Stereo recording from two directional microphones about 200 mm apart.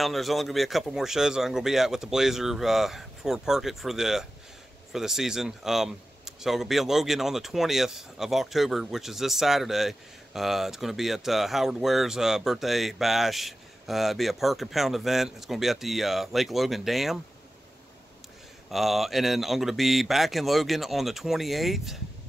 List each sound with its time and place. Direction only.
0.0 s speech: centre (ahead or behind)
18.7 s speech: centre (ahead or behind)